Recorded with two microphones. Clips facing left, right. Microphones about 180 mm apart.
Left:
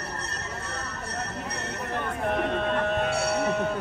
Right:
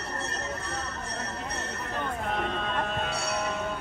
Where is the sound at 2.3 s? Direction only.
60° left (ahead or behind).